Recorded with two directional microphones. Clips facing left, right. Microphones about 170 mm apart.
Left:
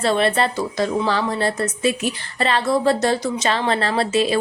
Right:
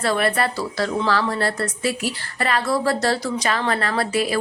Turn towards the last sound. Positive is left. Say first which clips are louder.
# left 3 dB
turn(degrees=25)  # may be behind; listen again after turning